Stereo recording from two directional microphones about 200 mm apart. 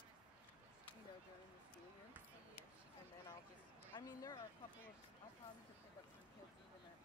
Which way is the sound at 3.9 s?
15° left (ahead or behind).